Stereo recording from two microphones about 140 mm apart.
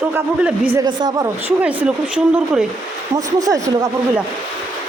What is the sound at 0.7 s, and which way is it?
Speech, 25° right (ahead or behind).